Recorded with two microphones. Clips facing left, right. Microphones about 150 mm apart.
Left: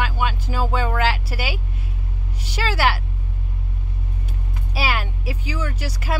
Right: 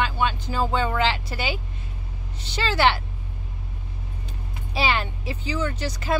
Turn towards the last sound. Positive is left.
turn(degrees=10)  # may be behind; listen again after turning